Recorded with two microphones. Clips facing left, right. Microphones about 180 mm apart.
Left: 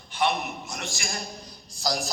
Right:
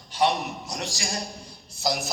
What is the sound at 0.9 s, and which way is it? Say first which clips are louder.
Speech: right 2 dB; 35° right (ahead or behind).